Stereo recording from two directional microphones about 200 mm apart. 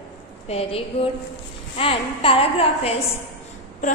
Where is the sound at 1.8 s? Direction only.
30° left (ahead or behind).